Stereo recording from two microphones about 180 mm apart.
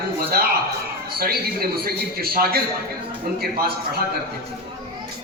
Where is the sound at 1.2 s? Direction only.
60° right (ahead or behind).